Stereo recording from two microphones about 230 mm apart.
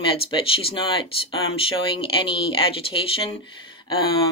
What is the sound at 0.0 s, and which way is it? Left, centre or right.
Speech, left.